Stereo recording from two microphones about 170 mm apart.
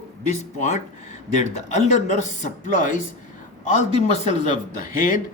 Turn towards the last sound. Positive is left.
turn(degrees=50)  # may be behind; listen again after turning